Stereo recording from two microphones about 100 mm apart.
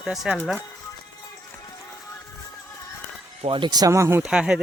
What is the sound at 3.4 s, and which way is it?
Speech, 60° right (ahead or behind).